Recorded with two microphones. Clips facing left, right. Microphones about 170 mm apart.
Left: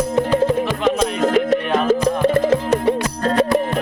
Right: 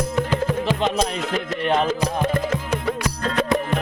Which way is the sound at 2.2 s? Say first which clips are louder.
Left 8 dB; 30° left (ahead or behind).